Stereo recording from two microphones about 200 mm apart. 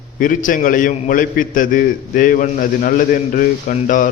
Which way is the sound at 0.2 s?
40° left (ahead or behind).